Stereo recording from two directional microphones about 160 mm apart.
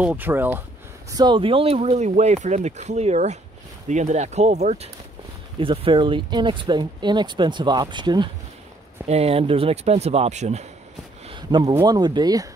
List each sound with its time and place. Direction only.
0.0 s speech: 10° right (ahead or behind)
1.1 s speech: 30° right (ahead or behind)
5.6 s speech: 35° right (ahead or behind)
9.0 s speech: 40° right (ahead or behind)
11.2 s a sound: 30° right (ahead or behind)
11.7 s speech: 25° right (ahead or behind)